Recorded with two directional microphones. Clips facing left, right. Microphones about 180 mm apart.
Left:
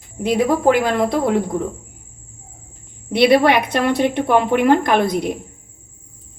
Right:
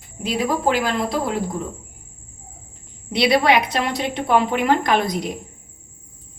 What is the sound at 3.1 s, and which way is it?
A woman's voice, 55° left (ahead or behind).